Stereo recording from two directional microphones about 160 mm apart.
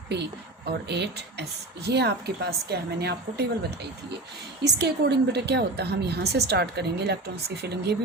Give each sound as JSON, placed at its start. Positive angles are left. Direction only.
{"t": 0.9, "sound": "a woman's voice", "side_deg": -90}
{"t": 4.6, "sound": "a woman's voice", "side_deg": -90}